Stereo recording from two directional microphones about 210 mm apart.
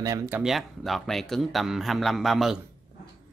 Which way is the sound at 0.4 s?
Centre (ahead or behind).